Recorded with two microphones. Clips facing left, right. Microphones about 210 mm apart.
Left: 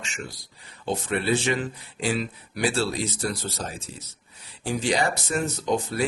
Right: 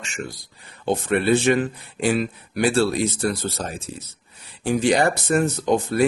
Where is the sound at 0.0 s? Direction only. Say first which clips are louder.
Right 5 dB; 50° right (ahead or behind).